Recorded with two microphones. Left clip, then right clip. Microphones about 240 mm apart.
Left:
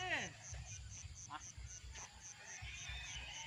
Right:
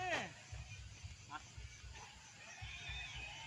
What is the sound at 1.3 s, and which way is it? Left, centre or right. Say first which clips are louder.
Music: even; centre.